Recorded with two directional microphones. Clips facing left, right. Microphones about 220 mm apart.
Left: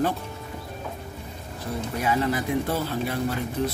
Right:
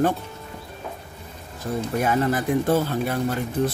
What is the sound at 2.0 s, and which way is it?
Speech, 50° right (ahead or behind).